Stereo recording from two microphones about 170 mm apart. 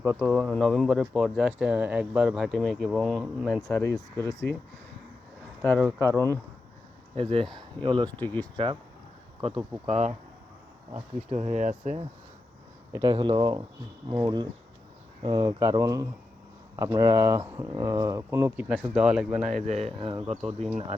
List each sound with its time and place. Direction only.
0.1 s speech: 10° right (ahead or behind)
0.3 s speech: 5° left (ahead or behind)
3.6 s speech: 15° left (ahead or behind)
6.0 s speech: 15° left (ahead or behind)
7.2 s speech: 35° right (ahead or behind)
8.2 s speech: 10° left (ahead or behind)
8.5 s speech: 30° right (ahead or behind)
9.8 s speech: 40° right (ahead or behind)
12.9 s speech: 25° right (ahead or behind); by 19.6 s 5° right (ahead or behind)
19.6 s speech: 35° right (ahead or behind)